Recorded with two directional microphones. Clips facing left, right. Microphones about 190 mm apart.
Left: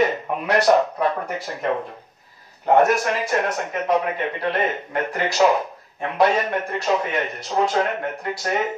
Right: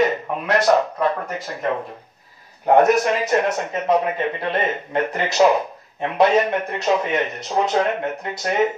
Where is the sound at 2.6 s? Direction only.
15° right (ahead or behind).